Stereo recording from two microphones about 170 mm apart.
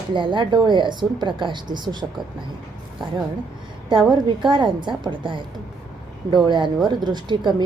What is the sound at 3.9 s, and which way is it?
Speech, 30° right (ahead or behind).